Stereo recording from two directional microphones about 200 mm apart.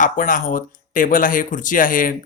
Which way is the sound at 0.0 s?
40° left (ahead or behind).